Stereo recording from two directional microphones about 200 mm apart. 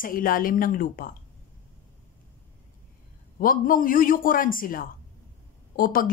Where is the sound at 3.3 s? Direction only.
45° left (ahead or behind).